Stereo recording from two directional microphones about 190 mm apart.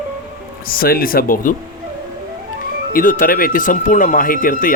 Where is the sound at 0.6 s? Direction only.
50° left (ahead or behind).